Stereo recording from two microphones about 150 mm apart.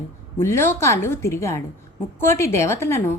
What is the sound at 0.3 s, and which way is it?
A woman's voice, 15° left (ahead or behind).